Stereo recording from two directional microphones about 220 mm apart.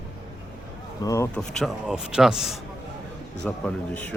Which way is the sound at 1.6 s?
5° right (ahead or behind).